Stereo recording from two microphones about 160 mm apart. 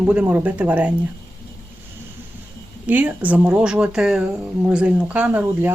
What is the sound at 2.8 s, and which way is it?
Speech, 10° right (ahead or behind).